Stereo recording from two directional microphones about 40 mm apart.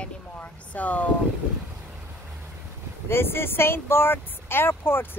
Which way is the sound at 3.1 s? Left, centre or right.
Left.